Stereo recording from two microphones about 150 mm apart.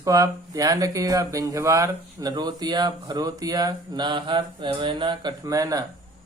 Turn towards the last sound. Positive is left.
turn(degrees=-25)  # may be behind; listen again after turning